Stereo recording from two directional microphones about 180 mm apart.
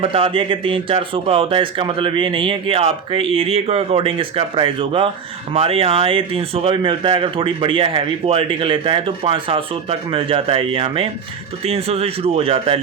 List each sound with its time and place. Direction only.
0.0 s speech: 30° right (ahead or behind)